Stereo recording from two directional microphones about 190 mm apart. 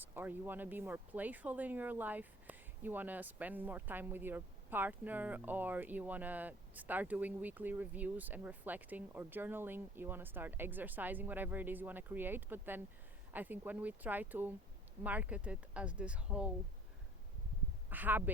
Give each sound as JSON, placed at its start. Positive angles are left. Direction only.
{"t": 0.0, "sound": "speech", "side_deg": -10}
{"t": 17.8, "sound": "speech", "side_deg": -10}